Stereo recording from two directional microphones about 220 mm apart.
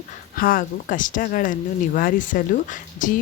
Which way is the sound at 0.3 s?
40° left (ahead or behind).